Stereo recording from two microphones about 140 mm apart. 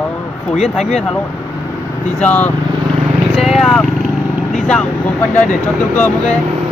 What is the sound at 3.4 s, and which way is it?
Speech, centre (ahead or behind).